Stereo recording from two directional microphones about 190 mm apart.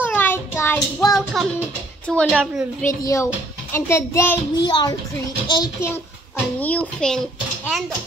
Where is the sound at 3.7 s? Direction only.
15° left (ahead or behind).